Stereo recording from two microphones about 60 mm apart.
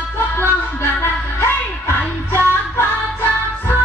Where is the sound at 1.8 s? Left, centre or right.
Left.